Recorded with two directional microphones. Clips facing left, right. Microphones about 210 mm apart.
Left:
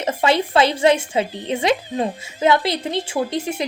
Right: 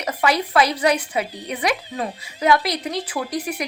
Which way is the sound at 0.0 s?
25° left (ahead or behind).